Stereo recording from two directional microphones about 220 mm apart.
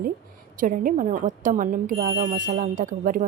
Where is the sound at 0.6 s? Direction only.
40° right (ahead or behind).